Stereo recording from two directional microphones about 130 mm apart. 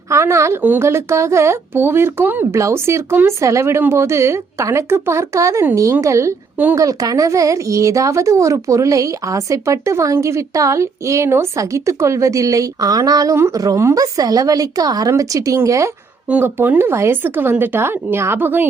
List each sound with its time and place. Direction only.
0.1 s speech: 20° right (ahead or behind)